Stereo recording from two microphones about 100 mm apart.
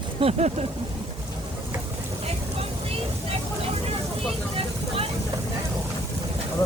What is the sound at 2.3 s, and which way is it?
Vehicle, 85° right.